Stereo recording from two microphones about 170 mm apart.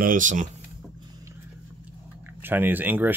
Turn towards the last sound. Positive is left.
turn(degrees=-10)  # may be behind; listen again after turning